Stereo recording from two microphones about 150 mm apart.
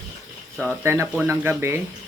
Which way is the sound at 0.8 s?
15° right (ahead or behind).